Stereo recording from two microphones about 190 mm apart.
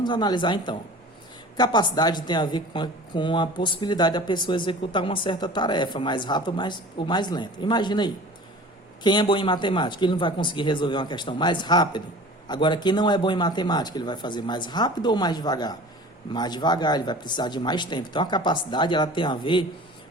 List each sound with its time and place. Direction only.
0.0 s speech: 20° left (ahead or behind)